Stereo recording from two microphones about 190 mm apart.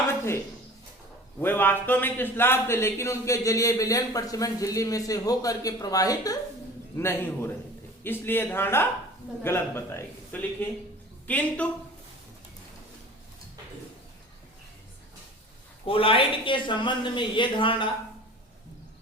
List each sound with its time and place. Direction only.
1.4 s a man's voice: 10° left (ahead or behind)
15.9 s speech: 30° left (ahead or behind)